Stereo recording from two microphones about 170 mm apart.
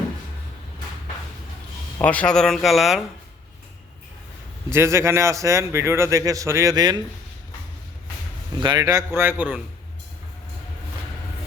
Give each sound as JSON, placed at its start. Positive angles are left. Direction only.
{"t": 2.0, "sound": "speech", "side_deg": 10}
{"t": 4.7, "sound": "a man's voice", "side_deg": -15}
{"t": 8.6, "sound": "a man's voice", "side_deg": -25}